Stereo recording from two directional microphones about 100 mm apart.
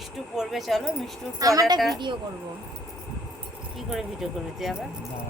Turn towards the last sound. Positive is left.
turn(degrees=-5)  # may be behind; listen again after turning